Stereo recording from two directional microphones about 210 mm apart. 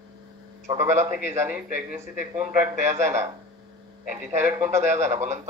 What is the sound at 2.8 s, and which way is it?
Speech, 35° right (ahead or behind).